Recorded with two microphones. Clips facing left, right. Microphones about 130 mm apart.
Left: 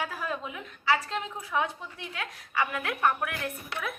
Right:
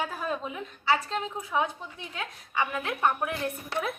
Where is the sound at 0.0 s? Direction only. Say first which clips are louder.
Right 2 dB; 25° right (ahead or behind).